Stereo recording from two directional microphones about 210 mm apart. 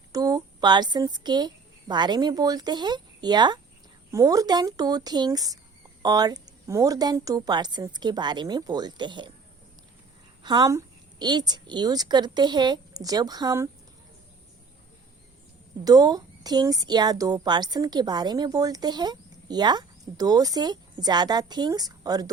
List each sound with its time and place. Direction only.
0.1 s a woman's voice: 15° right (ahead or behind)
10.4 s a woman's voice: 20° right (ahead or behind)
15.8 s a woman's voice: 20° right (ahead or behind)